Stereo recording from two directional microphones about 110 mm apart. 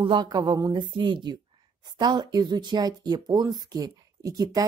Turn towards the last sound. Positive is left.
turn(degrees=-35)  # may be behind; listen again after turning